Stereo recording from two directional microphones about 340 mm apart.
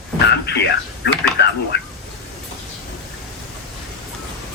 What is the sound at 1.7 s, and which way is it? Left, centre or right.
Speech, left.